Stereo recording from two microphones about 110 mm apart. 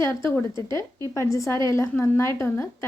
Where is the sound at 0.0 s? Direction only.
25° left (ahead or behind).